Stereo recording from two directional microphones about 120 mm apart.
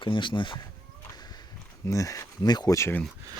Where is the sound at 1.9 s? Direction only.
25° left (ahead or behind).